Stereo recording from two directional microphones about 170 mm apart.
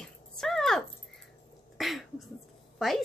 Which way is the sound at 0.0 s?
Centre (ahead or behind).